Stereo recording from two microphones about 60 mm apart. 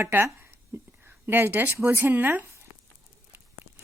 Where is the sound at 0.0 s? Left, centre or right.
Right.